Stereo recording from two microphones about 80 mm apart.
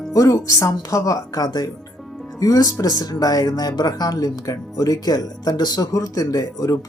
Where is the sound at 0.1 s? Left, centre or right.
Left.